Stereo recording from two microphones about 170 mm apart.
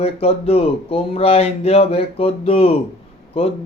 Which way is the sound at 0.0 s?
35° left (ahead or behind).